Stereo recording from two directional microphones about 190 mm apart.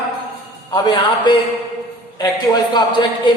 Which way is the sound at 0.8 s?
25° left (ahead or behind).